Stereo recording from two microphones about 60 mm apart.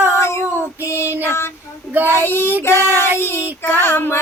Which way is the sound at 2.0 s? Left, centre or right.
Right.